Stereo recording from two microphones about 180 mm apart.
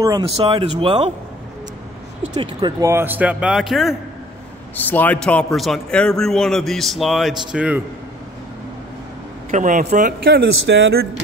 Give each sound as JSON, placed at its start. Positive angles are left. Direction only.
{"t": 0.2, "sound": "speech", "side_deg": -30}
{"t": 2.3, "sound": "speech", "side_deg": -25}
{"t": 2.8, "sound": "speech", "side_deg": -15}
{"t": 4.7, "sound": "a man's voice", "side_deg": 10}
{"t": 9.5, "sound": "speech", "side_deg": -45}